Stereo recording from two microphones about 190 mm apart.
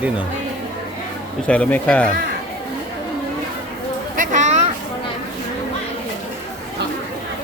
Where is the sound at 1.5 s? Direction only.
5° left (ahead or behind).